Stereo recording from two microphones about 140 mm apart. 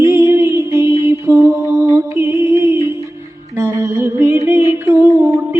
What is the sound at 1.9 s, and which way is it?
Music, 20° right (ahead or behind).